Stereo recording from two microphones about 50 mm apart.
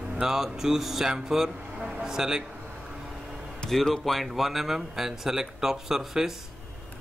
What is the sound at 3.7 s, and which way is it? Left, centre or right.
Speech, centre.